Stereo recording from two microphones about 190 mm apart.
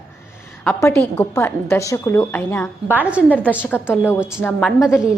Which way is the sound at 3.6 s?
10° left (ahead or behind).